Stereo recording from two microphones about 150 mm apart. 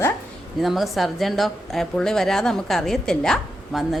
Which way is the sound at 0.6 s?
Centre (ahead or behind).